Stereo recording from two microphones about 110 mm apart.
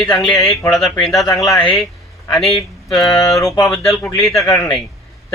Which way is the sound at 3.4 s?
30° left (ahead or behind).